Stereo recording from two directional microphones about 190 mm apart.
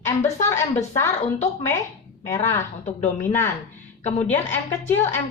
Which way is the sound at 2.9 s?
40° left (ahead or behind).